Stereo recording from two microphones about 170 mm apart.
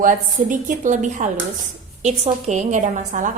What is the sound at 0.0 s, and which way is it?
A woman's voice, 50° right (ahead or behind).